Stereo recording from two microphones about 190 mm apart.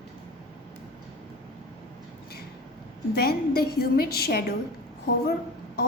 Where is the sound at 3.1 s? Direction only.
55° left (ahead or behind).